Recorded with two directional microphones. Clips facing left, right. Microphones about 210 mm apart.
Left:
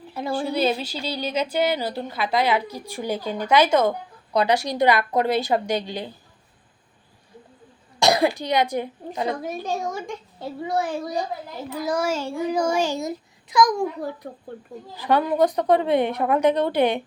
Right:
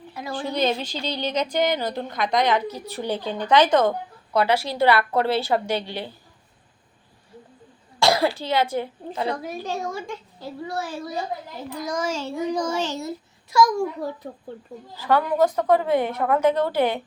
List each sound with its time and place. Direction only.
0.5 s a woman's voice: 5° left (ahead or behind)
7.9 s a woman's voice: 20° left (ahead or behind)
14.9 s a woman's voice: 15° left (ahead or behind)